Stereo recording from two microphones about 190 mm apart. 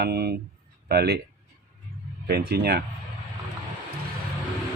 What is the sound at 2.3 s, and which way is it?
Speech, 55° right (ahead or behind).